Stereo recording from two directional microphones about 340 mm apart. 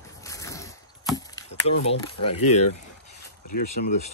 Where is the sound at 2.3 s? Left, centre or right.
Left.